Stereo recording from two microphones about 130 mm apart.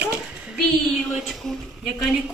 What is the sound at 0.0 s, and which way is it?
A woman's voice, 5° right (ahead or behind).